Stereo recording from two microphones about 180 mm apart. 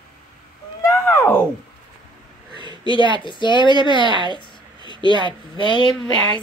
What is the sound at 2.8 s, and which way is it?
Speech, 25° left (ahead or behind).